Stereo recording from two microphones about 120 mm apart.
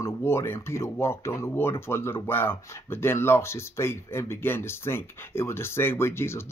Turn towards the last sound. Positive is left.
turn(degrees=20)  # may be behind; listen again after turning